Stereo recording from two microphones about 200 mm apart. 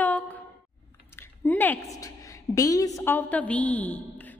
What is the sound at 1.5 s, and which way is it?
A woman's voice, 10° left (ahead or behind).